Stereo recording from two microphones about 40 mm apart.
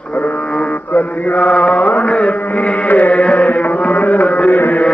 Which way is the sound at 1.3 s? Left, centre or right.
Left.